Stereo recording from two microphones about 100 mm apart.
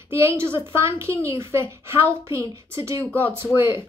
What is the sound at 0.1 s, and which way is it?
A woman's voice, 25° right (ahead or behind).